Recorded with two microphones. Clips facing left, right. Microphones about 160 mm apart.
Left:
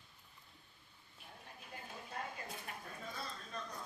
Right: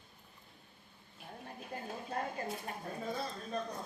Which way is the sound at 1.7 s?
45° right (ahead or behind).